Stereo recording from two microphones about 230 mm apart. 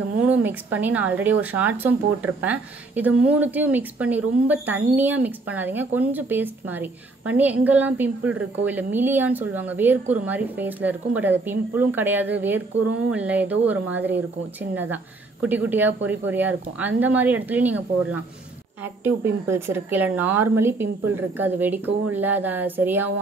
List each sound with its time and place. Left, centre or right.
0.4 s a woman's voice: centre